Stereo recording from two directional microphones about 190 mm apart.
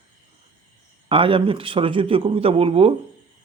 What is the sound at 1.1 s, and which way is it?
A man's voice, 30° right (ahead or behind).